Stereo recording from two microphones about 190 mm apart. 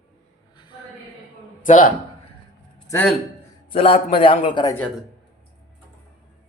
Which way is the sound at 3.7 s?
30° left (ahead or behind).